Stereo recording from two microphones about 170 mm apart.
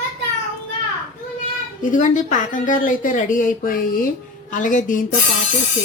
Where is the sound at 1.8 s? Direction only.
45° left (ahead or behind).